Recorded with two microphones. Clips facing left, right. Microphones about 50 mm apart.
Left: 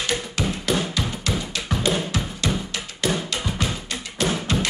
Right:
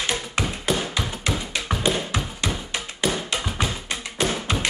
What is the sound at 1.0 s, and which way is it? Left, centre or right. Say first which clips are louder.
Music: even; right.